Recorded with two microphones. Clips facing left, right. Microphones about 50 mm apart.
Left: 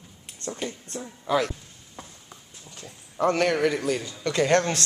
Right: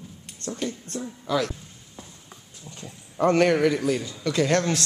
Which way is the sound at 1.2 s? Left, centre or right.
Left.